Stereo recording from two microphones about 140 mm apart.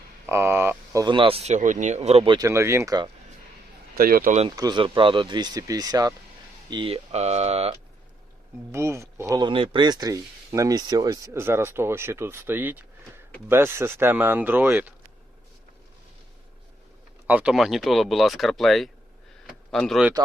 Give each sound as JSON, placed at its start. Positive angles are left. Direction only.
{"t": 0.3, "sound": "speech", "side_deg": -20}
{"t": 1.0, "sound": "speech", "side_deg": -35}
{"t": 2.4, "sound": "speech", "side_deg": -20}
{"t": 3.9, "sound": "speech", "side_deg": -90}
{"t": 4.4, "sound": "speech", "side_deg": -30}
{"t": 6.7, "sound": "speech", "side_deg": -40}
{"t": 8.7, "sound": "speech", "side_deg": -20}
{"t": 17.2, "sound": "speech", "side_deg": -10}